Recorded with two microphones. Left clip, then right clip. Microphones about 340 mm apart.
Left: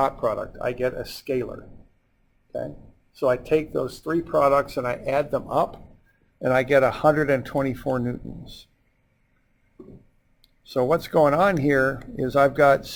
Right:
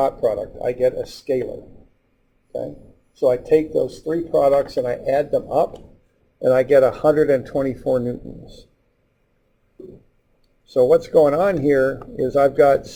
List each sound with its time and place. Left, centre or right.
0.0 s speech: left
0.8 s speech: left
2.5 s speech: left
4.3 s speech: left
6.4 s speech: left
8.0 s speech: left
10.8 s speech: left